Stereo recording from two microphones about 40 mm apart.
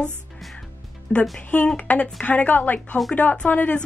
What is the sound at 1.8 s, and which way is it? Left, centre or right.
Speech, left.